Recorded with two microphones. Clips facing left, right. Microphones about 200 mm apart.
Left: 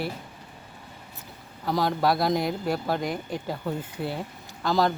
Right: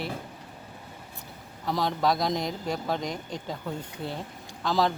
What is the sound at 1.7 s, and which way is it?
Speech, centre (ahead or behind).